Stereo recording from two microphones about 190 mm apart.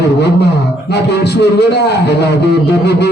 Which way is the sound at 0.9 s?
60° left (ahead or behind).